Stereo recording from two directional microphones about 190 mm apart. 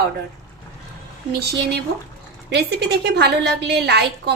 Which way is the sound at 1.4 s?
60° right (ahead or behind).